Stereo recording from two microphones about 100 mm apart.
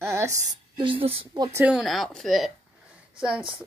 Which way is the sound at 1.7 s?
Centre (ahead or behind).